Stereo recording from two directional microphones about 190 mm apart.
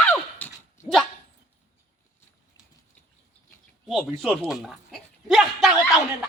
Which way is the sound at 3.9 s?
Centre (ahead or behind).